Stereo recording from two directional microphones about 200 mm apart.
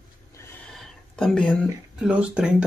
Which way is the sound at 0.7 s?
Centre (ahead or behind).